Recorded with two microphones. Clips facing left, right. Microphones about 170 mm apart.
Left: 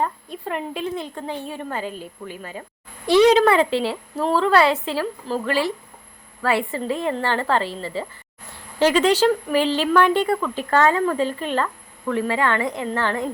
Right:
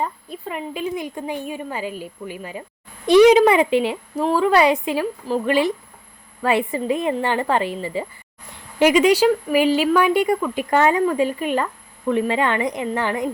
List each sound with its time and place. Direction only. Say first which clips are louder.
0.4 s speech: even; 5° right (ahead or behind)